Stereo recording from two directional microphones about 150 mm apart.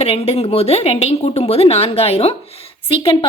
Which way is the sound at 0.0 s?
40° left (ahead or behind).